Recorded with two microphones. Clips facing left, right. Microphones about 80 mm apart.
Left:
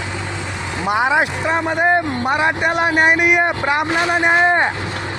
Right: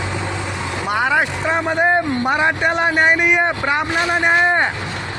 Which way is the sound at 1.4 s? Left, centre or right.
Centre.